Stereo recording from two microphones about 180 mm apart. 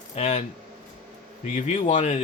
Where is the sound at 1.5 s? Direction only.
40° left (ahead or behind).